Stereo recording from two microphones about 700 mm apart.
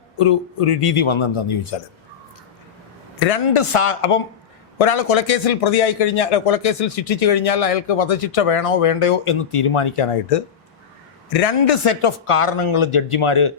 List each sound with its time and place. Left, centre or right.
0.2 s speech: left
3.2 s speech: left